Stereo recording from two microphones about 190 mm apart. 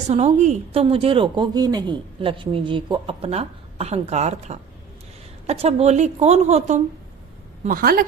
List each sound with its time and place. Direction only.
0.1 s a woman's voice: 35° right (ahead or behind)
7.6 s a woman's voice: 50° right (ahead or behind)